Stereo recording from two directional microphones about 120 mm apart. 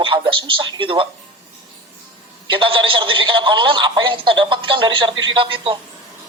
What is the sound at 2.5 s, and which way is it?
Speech, 45° right (ahead or behind).